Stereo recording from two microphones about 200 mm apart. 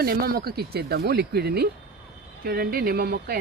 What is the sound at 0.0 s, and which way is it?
Speech, 50° right (ahead or behind).